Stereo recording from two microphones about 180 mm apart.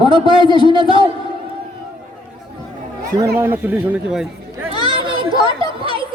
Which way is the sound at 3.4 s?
10° right (ahead or behind).